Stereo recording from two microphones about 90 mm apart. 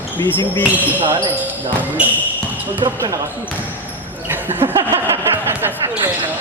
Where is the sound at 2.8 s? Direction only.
40° right (ahead or behind).